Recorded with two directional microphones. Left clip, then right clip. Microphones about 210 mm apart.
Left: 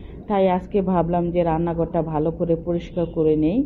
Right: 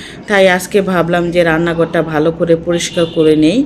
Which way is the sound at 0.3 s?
5° right (ahead or behind).